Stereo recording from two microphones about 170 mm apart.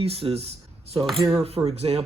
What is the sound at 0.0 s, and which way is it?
Speech, 35° right (ahead or behind).